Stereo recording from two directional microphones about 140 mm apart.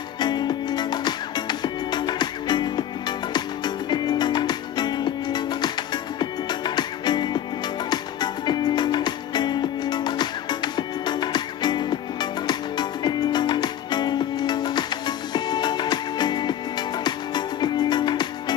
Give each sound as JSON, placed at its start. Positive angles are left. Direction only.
{"t": 0.2, "sound": "music", "side_deg": 30}